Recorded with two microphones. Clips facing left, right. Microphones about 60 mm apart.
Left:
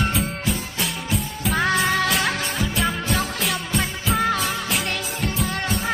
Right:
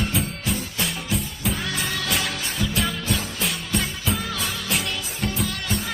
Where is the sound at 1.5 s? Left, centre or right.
Left.